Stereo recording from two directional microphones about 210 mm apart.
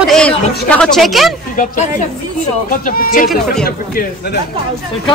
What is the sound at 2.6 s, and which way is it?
Speech, 45° left (ahead or behind).